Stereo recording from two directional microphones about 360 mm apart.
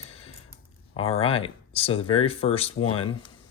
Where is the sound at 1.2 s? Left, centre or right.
Centre.